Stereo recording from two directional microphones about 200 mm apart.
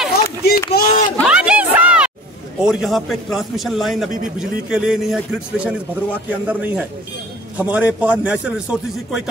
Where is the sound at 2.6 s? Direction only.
Centre (ahead or behind).